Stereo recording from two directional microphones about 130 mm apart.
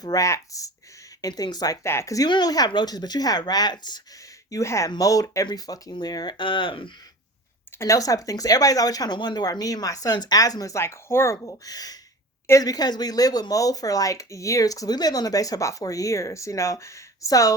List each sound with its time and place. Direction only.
0.0 s speech: 25° left (ahead or behind)
4.5 s speech: 25° left (ahead or behind); by 6.9 s 40° left (ahead or behind)
7.8 s speech: 25° left (ahead or behind)